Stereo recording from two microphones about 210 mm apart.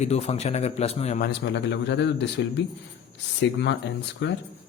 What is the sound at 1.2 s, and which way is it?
A man's voice, 55° left (ahead or behind).